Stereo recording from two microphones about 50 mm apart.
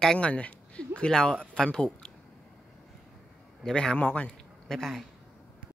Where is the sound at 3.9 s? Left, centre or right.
Left.